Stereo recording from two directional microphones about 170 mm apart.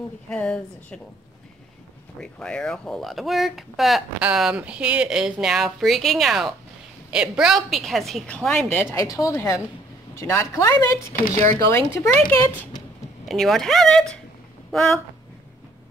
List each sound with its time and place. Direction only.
0.3 s speech: 5° left (ahead or behind)
2.1 s speech: 5° left (ahead or behind)
8.9 s a woman's voice: 20° left (ahead or behind)
13.3 s speech: centre (ahead or behind)